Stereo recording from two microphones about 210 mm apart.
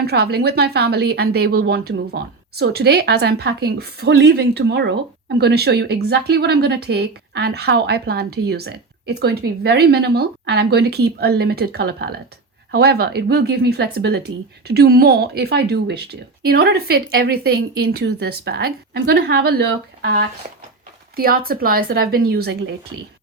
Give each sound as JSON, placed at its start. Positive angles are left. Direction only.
{"t": 0.0, "sound": "speech", "side_deg": -50}